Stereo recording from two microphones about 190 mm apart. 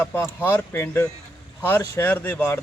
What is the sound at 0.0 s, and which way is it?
A man's voice, 10° left (ahead or behind).